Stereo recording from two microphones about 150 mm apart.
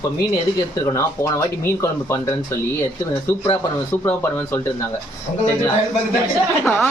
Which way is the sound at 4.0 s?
15° left (ahead or behind).